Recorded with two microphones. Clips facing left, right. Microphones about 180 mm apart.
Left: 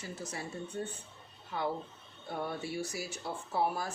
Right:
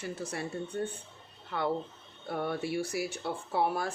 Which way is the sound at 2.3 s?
65° right (ahead or behind).